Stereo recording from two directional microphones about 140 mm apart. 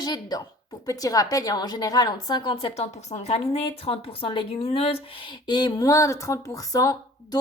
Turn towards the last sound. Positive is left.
turn(degrees=25)  # may be behind; listen again after turning